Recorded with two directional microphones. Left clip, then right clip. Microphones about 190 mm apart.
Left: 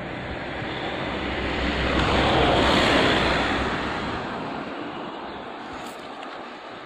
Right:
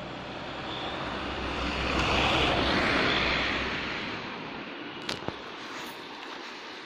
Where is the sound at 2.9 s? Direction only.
60° left (ahead or behind).